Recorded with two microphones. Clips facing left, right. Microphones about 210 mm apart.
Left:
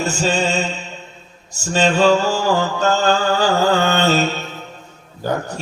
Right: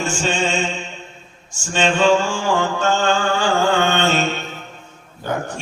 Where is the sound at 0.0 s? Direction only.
40° left (ahead or behind).